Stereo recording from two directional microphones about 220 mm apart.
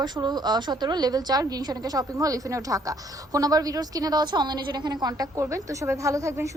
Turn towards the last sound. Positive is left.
turn(degrees=-15)  # may be behind; listen again after turning